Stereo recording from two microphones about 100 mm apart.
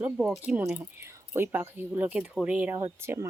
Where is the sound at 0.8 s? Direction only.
20° right (ahead or behind).